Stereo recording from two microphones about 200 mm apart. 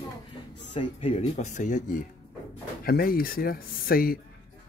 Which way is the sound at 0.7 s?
25° left (ahead or behind).